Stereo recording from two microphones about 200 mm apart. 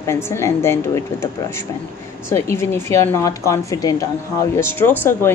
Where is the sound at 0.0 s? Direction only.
15° left (ahead or behind).